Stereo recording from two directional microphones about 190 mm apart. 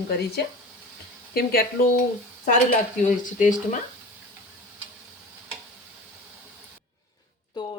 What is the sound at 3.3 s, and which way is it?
Speech, 40° left (ahead or behind).